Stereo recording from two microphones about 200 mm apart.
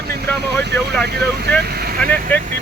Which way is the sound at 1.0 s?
55° right (ahead or behind).